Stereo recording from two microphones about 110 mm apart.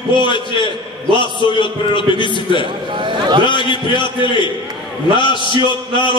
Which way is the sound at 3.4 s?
45° left (ahead or behind).